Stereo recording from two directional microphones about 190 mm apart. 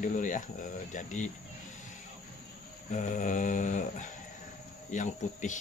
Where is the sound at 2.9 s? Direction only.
40° left (ahead or behind).